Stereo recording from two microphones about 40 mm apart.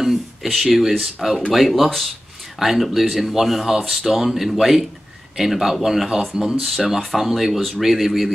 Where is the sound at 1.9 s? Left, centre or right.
Centre.